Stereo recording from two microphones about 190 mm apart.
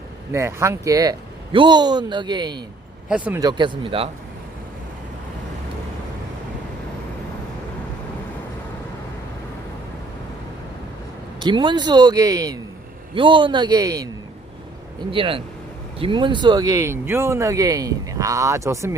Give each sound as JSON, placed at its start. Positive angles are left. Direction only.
{"t": 0.3, "sound": "speech", "side_deg": -15}
{"t": 3.1, "sound": "speech", "side_deg": -5}
{"t": 3.4, "sound": "speech", "side_deg": -25}
{"t": 11.3, "sound": "speech", "side_deg": -25}
{"t": 15.1, "sound": "speech", "side_deg": -30}